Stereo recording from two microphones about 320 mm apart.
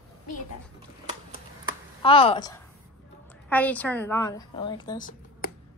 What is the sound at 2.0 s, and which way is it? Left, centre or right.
A woman's voice, centre.